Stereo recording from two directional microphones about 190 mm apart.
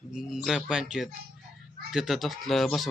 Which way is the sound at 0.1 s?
Centre (ahead or behind).